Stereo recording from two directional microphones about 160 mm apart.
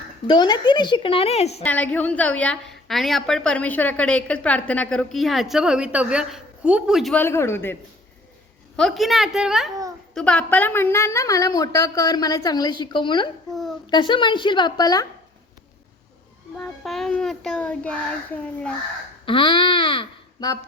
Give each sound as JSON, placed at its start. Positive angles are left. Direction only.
{"t": 0.3, "sound": "a woman's voice", "side_deg": 25}
{"t": 1.6, "sound": "a woman's voice", "side_deg": 10}
{"t": 7.1, "sound": "a child's voice", "side_deg": 15}
{"t": 8.7, "sound": "a woman's voice", "side_deg": 0}
{"t": 13.5, "sound": "a child's voice", "side_deg": 0}
{"t": 13.9, "sound": "a woman's voice", "side_deg": 30}
{"t": 16.6, "sound": "a child's voice", "side_deg": 0}
{"t": 19.2, "sound": "speech", "side_deg": 30}